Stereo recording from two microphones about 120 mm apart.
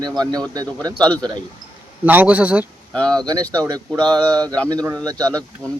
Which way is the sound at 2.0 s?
15° right (ahead or behind).